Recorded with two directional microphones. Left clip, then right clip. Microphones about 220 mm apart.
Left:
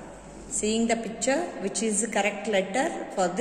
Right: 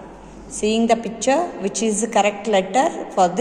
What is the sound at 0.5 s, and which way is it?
A woman's voice, 20° right (ahead or behind).